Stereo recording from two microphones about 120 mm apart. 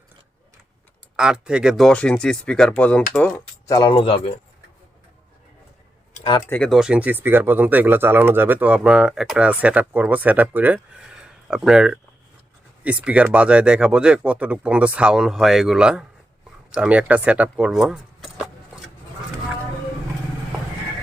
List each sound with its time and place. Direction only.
1.1 s speech: 5° right (ahead or behind); by 3.4 s 10° left (ahead or behind)
3.7 s speech: 35° left (ahead or behind)
6.5 s speech: 10° left (ahead or behind)
6.7 s speech: 5° right (ahead or behind)